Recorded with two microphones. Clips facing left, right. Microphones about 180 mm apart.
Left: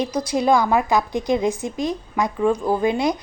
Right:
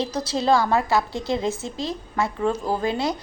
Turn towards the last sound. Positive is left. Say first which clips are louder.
# left 4 dB
turn(degrees=15)  # may be behind; listen again after turning